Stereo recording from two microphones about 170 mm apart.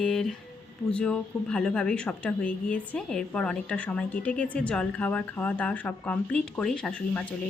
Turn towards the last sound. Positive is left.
turn(degrees=5)  # may be behind; listen again after turning